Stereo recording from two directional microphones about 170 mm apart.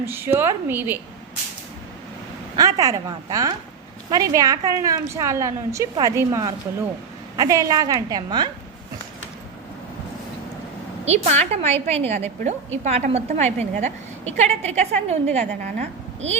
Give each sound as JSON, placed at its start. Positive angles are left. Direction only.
{"t": 0.0, "sound": "a woman's voice", "side_deg": -15}
{"t": 2.6, "sound": "a woman's voice", "side_deg": -20}
{"t": 11.0, "sound": "a woman's voice", "side_deg": -40}